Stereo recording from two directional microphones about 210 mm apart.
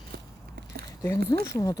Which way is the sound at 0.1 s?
50° right (ahead or behind).